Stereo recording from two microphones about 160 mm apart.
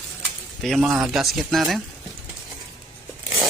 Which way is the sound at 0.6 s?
Centre (ahead or behind).